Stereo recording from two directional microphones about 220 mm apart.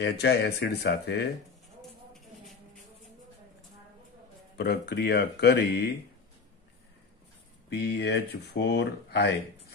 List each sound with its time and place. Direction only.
0.0 s speech: 50° left (ahead or behind)
1.8 s a sound: centre (ahead or behind)
4.6 s speech: 50° left (ahead or behind)
7.7 s speech: 50° left (ahead or behind)